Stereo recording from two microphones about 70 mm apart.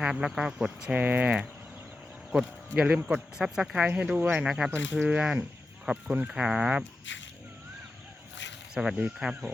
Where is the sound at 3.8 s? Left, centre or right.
Centre.